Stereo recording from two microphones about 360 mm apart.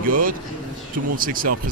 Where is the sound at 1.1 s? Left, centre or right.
Right.